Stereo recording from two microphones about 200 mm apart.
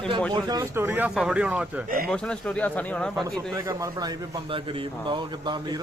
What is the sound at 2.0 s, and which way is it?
Speech, 5° left (ahead or behind).